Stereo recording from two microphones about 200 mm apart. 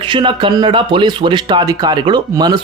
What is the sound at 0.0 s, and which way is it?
Speech, 25° right (ahead or behind).